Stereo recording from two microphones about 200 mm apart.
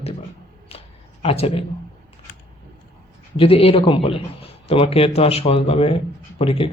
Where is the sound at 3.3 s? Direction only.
25° left (ahead or behind).